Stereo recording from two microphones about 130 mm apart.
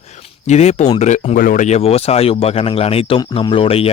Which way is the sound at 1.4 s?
85° left.